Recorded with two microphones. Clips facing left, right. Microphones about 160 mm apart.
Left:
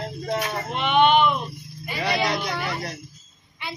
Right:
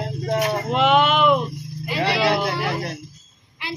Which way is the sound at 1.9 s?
90° right.